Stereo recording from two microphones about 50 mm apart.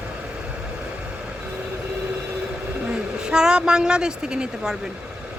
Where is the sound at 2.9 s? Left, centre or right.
Centre.